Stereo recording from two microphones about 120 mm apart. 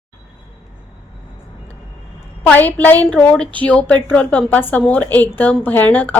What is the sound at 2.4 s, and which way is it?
A woman's voice, 10° left (ahead or behind).